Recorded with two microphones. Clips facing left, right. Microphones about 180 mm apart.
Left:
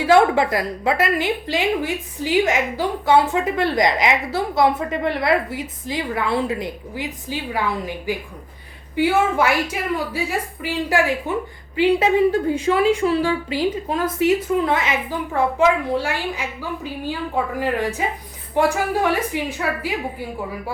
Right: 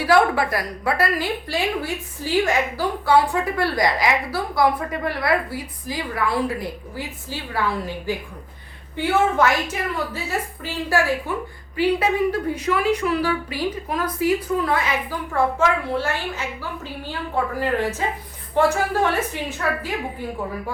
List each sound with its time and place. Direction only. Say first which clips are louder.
0.0 s a woman's voice: left 3 dB; 25° left (ahead or behind)
17.6 s a woman's voice: left 1 dB; 15° left (ahead or behind)